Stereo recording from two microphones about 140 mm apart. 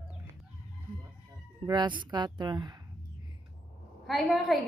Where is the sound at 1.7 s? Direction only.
30° right (ahead or behind).